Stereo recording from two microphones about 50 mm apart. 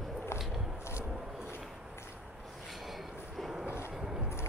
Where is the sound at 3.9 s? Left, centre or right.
Centre.